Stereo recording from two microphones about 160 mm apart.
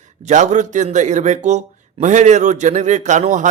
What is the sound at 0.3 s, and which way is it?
Speech, 50° right (ahead or behind).